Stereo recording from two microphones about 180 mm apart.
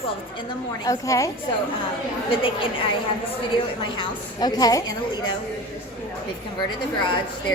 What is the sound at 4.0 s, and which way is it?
Speech, 20° left (ahead or behind).